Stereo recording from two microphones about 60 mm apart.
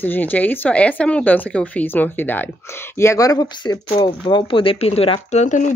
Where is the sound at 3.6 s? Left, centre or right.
Left.